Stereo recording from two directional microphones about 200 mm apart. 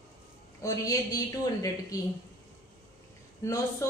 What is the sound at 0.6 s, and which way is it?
Speech, 15° left (ahead or behind).